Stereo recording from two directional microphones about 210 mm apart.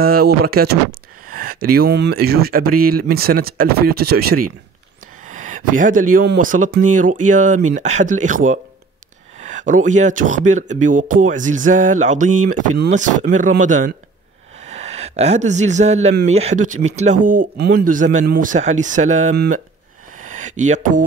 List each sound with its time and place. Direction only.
0.0 s speech: 45° right (ahead or behind)
19.3 s speech: 50° right (ahead or behind)
20.2 s a sound: 35° right (ahead or behind)